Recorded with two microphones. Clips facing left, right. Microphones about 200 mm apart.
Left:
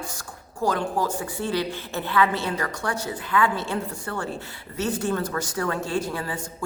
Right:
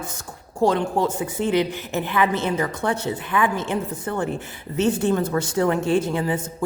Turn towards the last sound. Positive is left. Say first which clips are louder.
# right 6 dB
turn(degrees=-20)  # may be behind; listen again after turning